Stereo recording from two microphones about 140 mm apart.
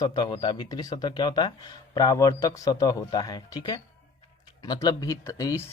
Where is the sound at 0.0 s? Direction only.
30° left (ahead or behind).